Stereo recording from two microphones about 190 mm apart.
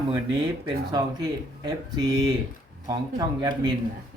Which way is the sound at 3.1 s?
20° right (ahead or behind).